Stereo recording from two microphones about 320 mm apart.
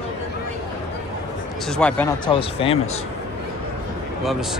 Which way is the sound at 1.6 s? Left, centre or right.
Centre.